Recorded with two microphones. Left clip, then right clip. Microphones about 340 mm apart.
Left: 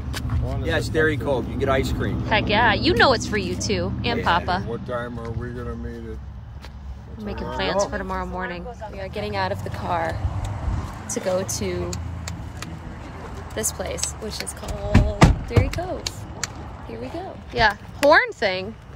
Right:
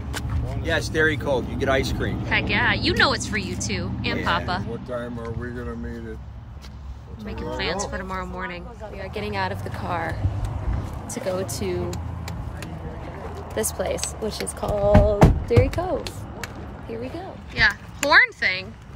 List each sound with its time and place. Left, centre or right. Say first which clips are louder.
0.7 s speech: even; centre
7.2 s speech: left 2 dB; centre
11.1 s speech: left 3 dB; centre
13.6 s speech: right 3 dB; centre
15.0 s speech: right 2 dB; centre
17.6 s speech: left 1 dB; centre